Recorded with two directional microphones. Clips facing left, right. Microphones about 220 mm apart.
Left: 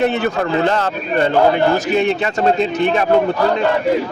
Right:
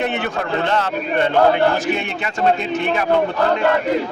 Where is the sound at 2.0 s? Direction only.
35° left (ahead or behind).